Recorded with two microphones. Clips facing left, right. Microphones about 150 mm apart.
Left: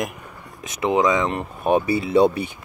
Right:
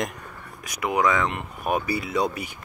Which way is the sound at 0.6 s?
25° left (ahead or behind).